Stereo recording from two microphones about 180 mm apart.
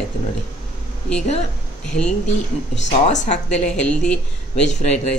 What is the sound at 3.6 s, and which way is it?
Speech, 5° left (ahead or behind).